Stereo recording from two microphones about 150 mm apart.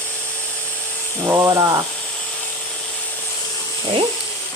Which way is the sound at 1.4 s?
30° right (ahead or behind).